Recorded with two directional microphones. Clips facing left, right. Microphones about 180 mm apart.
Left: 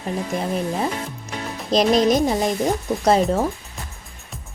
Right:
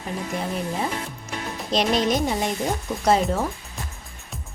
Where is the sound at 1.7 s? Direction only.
40° left (ahead or behind).